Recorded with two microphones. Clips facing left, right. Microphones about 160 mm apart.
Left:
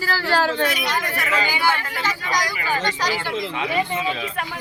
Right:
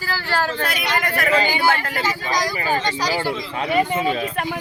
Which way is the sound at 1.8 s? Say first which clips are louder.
Right 3 dB; 40° right (ahead or behind).